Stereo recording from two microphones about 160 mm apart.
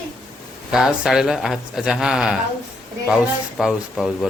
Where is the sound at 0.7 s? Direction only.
5° right (ahead or behind).